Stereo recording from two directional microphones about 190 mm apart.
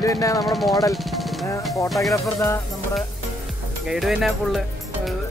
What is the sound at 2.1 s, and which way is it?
Speech, 15° left (ahead or behind).